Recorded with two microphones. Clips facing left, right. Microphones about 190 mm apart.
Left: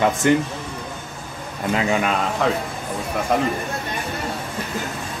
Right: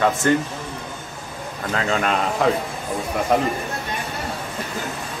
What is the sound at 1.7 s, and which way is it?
Speech, 15° left (ahead or behind).